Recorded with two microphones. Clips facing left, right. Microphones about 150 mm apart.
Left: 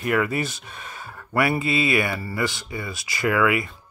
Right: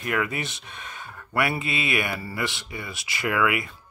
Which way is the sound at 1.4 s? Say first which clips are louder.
Left 5 dB; 35° left (ahead or behind).